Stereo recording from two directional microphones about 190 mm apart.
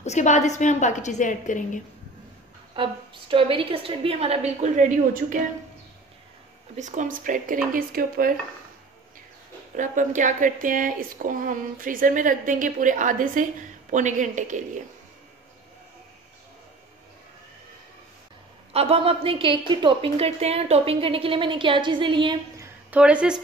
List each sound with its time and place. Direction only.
0.0 s a woman's voice: 40° left (ahead or behind)
2.7 s a woman's voice: 25° right (ahead or behind); by 5.4 s 40° right (ahead or behind)
6.8 s speech: 40° right (ahead or behind)
9.8 s speech: 40° right (ahead or behind)
18.7 s a woman's voice: 30° right (ahead or behind)
22.8 s a woman's voice: 5° right (ahead or behind)